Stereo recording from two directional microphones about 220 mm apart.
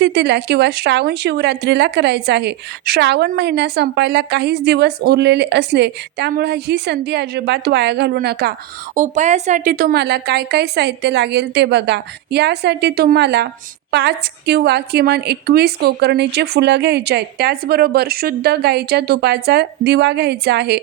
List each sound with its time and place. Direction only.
0.0 s a woman's voice: 50° right (ahead or behind)
9.0 s a woman's voice: 35° right (ahead or behind)